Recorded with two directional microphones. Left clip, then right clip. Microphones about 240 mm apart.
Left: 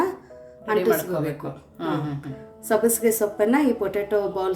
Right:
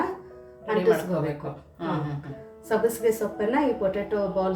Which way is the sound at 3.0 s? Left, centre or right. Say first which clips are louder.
Left 4 dB; left.